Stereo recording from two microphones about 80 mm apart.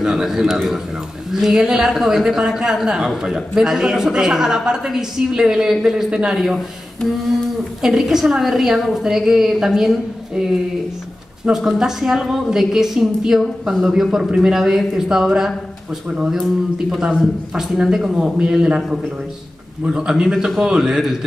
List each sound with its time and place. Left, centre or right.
0.0 s a man's voice: centre
16.9 s speech: centre